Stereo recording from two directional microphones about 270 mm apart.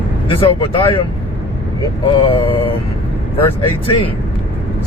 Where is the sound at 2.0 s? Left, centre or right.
Centre.